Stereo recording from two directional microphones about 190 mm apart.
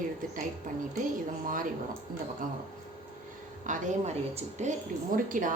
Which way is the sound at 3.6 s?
40° right (ahead or behind).